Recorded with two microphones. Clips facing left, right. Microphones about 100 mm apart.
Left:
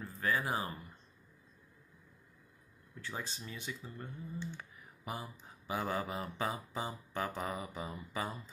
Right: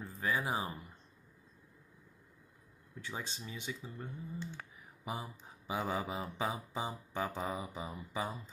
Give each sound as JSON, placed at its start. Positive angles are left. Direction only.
{"t": 0.0, "sound": "speech", "side_deg": -20}
{"t": 3.0, "sound": "speech", "side_deg": -20}